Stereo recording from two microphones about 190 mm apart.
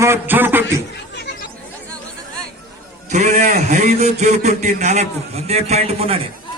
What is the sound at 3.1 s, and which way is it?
A man's voice, 40° right (ahead or behind).